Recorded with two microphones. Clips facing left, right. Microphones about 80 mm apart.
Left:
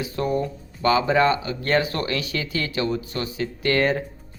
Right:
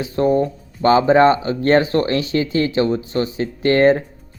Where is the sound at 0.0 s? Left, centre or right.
Right.